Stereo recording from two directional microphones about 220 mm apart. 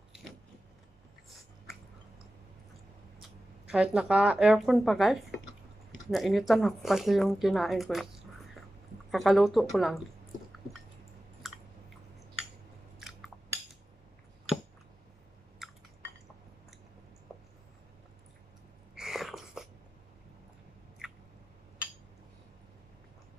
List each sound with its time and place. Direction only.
3.2 s speech: 5° right (ahead or behind)
9.1 s speech: centre (ahead or behind)
15.6 s liquid: centre (ahead or behind)
18.9 s a sound: centre (ahead or behind)